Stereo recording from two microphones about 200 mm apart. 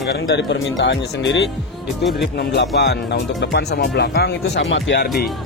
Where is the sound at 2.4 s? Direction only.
60° left (ahead or behind).